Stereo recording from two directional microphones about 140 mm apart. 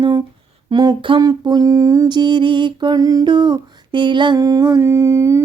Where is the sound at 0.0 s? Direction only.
25° right (ahead or behind).